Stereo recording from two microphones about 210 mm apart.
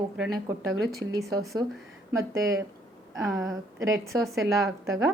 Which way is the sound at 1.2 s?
Centre (ahead or behind).